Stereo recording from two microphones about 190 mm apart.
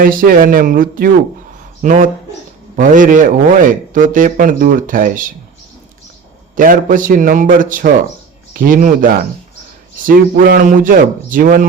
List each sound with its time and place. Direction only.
0.0 s a man's voice: 50° right (ahead or behind)
6.6 s a man's voice: 45° right (ahead or behind)